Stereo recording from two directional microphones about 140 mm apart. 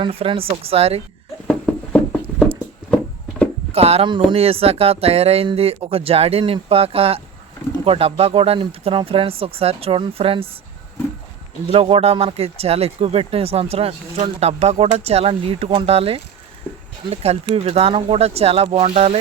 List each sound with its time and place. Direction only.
0.0 s speech: 40° right (ahead or behind)
1.5 s a sound: 5° left (ahead or behind)
3.7 s speech: 45° right (ahead or behind)
11.7 s speech: 45° right (ahead or behind)